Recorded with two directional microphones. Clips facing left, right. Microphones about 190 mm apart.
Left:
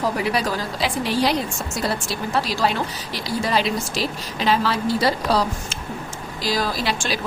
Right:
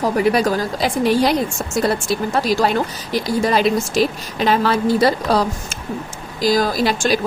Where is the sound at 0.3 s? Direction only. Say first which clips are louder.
Right 6 dB; 45° right (ahead or behind).